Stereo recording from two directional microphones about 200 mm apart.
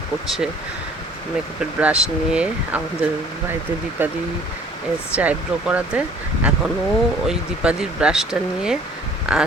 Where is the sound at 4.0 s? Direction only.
10° right (ahead or behind).